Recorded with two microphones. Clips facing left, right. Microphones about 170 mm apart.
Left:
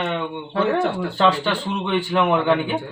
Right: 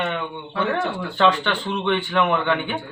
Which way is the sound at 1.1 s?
5° left (ahead or behind).